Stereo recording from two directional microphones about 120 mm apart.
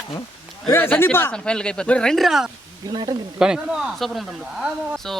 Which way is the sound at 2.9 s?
35° right (ahead or behind).